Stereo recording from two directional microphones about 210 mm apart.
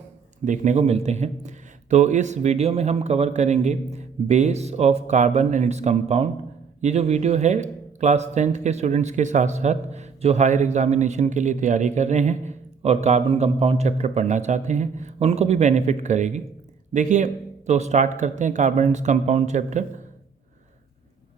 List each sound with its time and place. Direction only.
0.4 s speech: 35° right (ahead or behind)